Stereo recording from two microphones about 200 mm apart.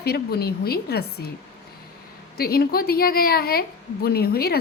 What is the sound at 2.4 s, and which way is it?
A woman's voice, 50° left (ahead or behind).